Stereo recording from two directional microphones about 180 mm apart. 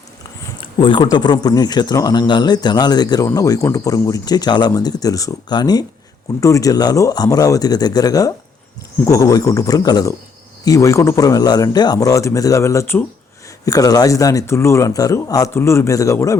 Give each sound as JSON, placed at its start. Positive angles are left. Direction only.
{"t": 0.6, "sound": "a man's voice", "side_deg": 25}